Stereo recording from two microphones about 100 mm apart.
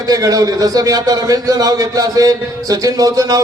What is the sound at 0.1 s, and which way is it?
A man's voice, 35° right (ahead or behind).